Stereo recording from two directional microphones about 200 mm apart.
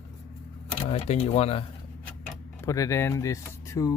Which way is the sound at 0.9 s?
30° left (ahead or behind).